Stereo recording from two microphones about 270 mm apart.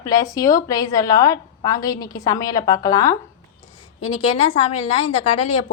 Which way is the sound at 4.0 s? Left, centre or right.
Left.